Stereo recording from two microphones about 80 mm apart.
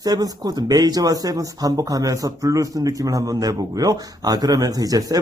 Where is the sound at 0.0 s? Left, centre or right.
Right.